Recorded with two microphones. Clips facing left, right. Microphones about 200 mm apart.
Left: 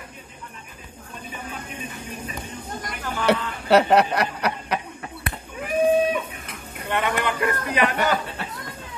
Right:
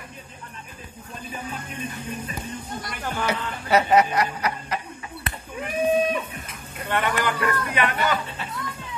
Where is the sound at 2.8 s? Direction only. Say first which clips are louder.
Left 6 dB; 65° left (ahead or behind).